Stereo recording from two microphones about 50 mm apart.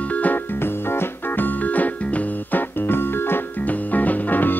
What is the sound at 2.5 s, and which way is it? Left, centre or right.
Music, left.